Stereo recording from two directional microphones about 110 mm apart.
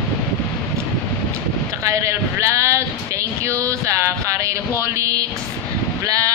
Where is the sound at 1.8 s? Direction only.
25° right (ahead or behind).